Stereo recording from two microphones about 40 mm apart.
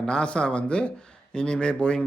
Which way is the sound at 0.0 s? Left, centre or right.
Left.